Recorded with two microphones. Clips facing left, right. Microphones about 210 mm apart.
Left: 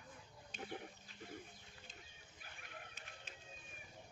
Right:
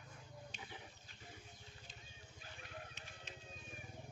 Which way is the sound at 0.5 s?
55° left (ahead or behind).